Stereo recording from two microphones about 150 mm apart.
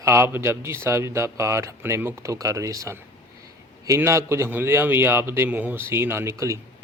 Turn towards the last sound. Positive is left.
turn(degrees=-15)  # may be behind; listen again after turning